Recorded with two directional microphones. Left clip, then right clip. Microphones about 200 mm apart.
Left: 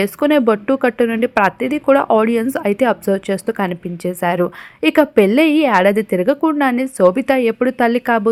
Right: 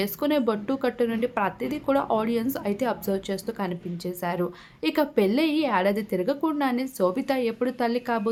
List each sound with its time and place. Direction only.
0.0 s speech: 30° left (ahead or behind)